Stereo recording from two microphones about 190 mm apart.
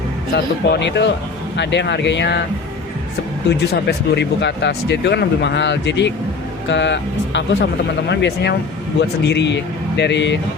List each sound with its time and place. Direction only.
0.3 s speech: 65° left (ahead or behind)
3.6 s speech: 60° left (ahead or behind)